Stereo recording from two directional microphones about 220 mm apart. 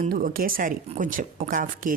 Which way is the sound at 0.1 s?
40° right (ahead or behind).